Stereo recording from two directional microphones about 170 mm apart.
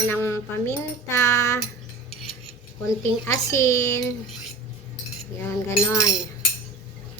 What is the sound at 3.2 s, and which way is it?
Speech, 20° left (ahead or behind).